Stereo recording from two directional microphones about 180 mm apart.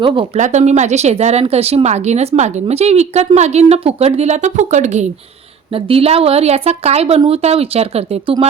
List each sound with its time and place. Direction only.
0.0 s speech: 30° right (ahead or behind)
0.3 s speech: 40° right (ahead or behind)